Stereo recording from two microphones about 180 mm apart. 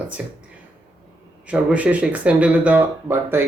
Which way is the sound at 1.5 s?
5° right (ahead or behind).